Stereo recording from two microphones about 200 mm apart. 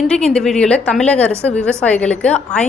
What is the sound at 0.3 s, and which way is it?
A woman's voice, 5° left (ahead or behind).